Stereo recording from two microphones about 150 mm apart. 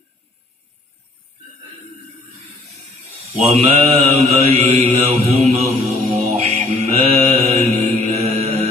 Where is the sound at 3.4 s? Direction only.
50° right (ahead or behind).